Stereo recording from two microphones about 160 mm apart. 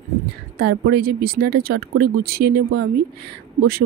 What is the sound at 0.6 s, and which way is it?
Speech, 85° right.